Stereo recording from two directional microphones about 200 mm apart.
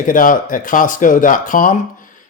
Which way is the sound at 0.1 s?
45° left (ahead or behind).